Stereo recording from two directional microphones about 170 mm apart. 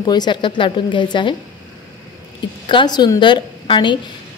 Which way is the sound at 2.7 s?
25° left (ahead or behind).